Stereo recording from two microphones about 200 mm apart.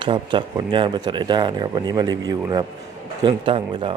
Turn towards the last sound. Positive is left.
turn(degrees=-25)  # may be behind; listen again after turning